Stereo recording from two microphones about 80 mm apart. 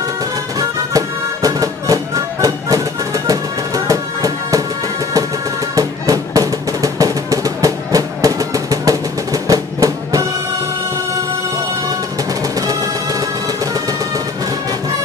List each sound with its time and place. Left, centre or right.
0.6 s music: right
5.8 s music: right
12.5 s music: right